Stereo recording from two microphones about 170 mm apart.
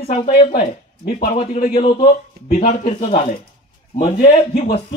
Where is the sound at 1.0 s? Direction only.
60° left (ahead or behind).